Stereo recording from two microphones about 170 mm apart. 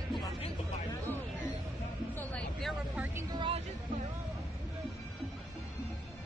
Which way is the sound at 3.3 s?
30° right (ahead or behind).